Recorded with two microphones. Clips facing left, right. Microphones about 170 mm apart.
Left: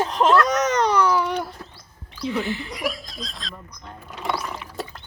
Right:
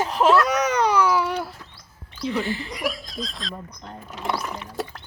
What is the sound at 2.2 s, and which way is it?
Speech, centre (ahead or behind).